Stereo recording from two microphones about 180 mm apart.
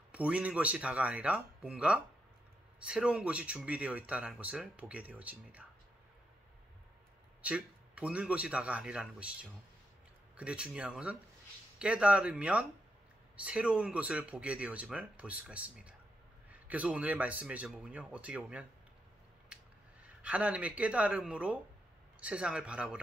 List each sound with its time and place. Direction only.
0.1 s speech: 5° right (ahead or behind)
7.4 s speech: 5° right (ahead or behind)
20.2 s speech: 5° right (ahead or behind)